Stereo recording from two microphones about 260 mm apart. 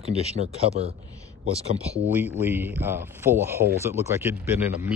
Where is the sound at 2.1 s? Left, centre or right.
Centre.